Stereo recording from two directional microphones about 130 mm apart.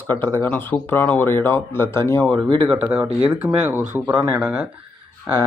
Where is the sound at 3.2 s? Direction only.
15° right (ahead or behind).